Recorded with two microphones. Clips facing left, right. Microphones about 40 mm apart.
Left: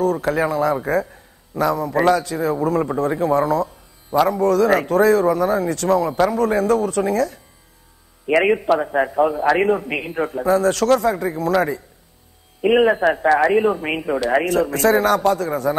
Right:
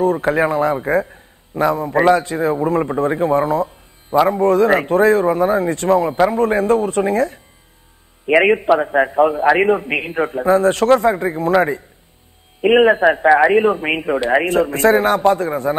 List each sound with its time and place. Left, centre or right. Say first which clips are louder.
0.0 s a man's voice: right 3 dB; right